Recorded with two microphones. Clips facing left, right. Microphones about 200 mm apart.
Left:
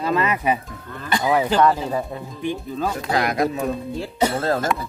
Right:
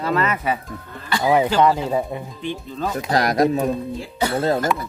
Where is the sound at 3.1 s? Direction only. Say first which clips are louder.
Right 4 dB; 40° right (ahead or behind).